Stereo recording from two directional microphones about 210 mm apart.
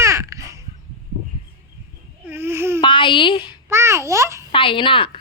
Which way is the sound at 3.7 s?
10° right (ahead or behind).